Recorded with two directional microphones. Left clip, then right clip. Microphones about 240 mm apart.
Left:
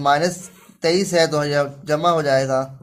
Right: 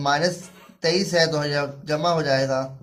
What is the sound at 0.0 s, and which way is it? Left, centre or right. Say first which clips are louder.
Speech: left 4 dB; left.